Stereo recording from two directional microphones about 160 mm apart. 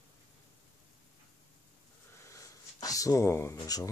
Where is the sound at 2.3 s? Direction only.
20° left (ahead or behind).